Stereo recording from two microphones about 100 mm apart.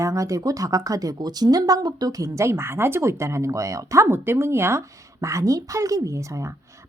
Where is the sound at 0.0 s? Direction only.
30° right (ahead or behind).